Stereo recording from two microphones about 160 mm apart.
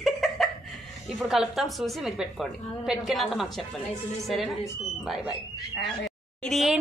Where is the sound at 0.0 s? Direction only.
Centre (ahead or behind).